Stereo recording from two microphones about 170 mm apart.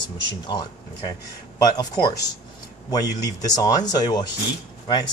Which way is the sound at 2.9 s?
20° left (ahead or behind).